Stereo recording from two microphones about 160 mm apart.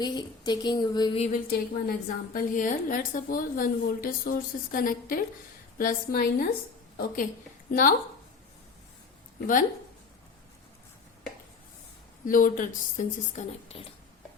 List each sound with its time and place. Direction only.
0.0 s speech: 25° left (ahead or behind)
1.5 s a woman's voice: 65° left (ahead or behind)
12.2 s a woman's voice: 55° left (ahead or behind)